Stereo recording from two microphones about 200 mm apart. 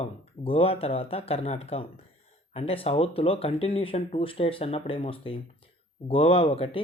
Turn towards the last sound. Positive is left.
turn(degrees=25)  # may be behind; listen again after turning